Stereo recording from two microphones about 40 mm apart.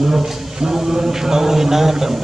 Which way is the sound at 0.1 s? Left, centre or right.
Centre.